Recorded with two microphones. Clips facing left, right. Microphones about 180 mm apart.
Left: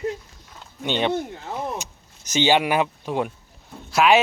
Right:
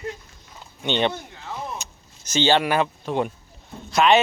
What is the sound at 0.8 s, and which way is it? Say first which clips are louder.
Speech: left 1 dB; 5° left (ahead or behind).